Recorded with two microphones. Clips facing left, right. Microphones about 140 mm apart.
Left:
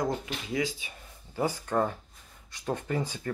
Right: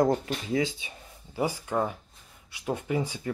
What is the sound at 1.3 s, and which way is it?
Speech, 10° right (ahead or behind).